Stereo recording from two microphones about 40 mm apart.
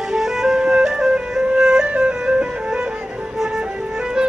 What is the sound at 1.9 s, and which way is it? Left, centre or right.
Music, right.